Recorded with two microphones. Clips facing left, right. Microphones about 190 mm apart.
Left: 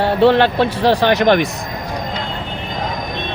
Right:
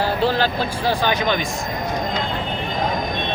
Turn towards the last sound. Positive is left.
turn(degrees=70)  # may be behind; listen again after turning